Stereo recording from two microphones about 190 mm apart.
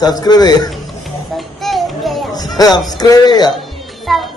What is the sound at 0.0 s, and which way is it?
Speech, 20° left (ahead or behind).